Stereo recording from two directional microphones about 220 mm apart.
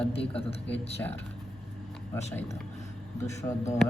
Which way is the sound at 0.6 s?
5° left (ahead or behind).